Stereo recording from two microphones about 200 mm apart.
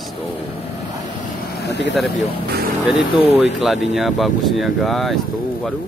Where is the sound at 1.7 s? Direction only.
60° left (ahead or behind).